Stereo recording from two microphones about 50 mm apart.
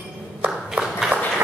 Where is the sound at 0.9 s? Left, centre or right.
Centre.